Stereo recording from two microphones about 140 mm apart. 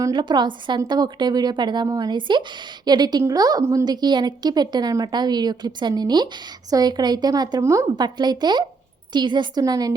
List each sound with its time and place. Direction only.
0.0 s a woman's voice: 35° right (ahead or behind)